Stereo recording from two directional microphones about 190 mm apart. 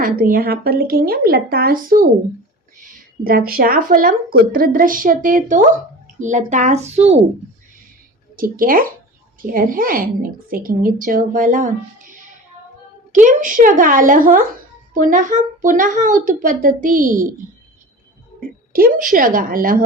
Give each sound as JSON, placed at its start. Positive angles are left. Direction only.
{"t": 0.0, "sound": "speech", "side_deg": -50}
{"t": 3.2, "sound": "speech", "side_deg": -50}
{"t": 8.4, "sound": "speech", "side_deg": -50}
{"t": 18.3, "sound": "speech", "side_deg": -50}